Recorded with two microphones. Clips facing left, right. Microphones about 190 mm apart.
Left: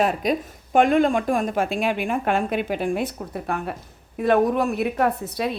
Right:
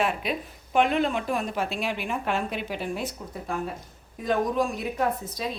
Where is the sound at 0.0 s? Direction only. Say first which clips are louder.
Left 6 dB; 40° left (ahead or behind).